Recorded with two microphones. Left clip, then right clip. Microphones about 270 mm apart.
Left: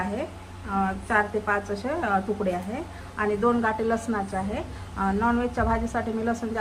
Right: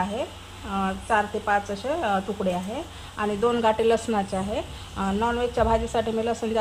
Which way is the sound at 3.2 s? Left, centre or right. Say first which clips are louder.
Even; right.